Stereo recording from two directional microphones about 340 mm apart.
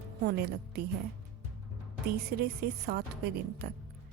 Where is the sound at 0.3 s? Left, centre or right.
Right.